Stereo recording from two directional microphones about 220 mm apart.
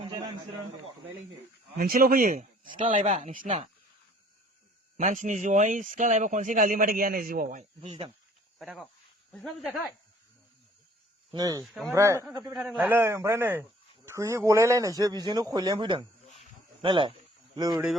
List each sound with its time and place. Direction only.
0.1 s a sound: 20° right (ahead or behind)
1.7 s speech: 40° right (ahead or behind)
4.9 s speech: 35° right (ahead or behind)
8.5 s speech: centre (ahead or behind)
11.3 s speech: 15° right (ahead or behind)
11.6 s speech: centre (ahead or behind)
11.9 s a man's voice: 10° right (ahead or behind)